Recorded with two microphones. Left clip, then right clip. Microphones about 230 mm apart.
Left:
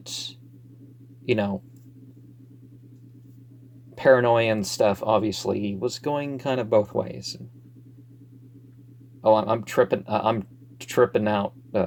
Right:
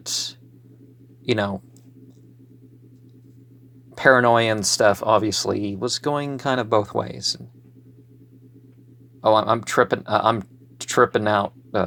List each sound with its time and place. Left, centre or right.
0.0 s cat: right
1.2 s speech: right
3.9 s speech: right
9.2 s speech: right